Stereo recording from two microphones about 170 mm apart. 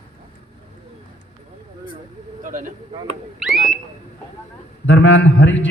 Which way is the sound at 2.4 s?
50° right (ahead or behind).